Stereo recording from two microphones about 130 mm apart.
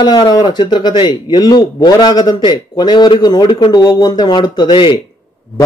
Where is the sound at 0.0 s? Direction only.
35° left (ahead or behind).